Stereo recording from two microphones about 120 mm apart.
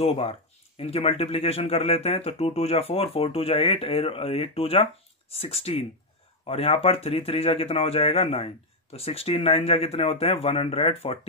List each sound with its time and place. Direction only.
0.0 s speech: 60° left (ahead or behind)